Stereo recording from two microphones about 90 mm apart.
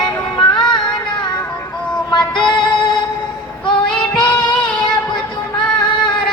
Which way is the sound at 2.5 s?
60° left (ahead or behind).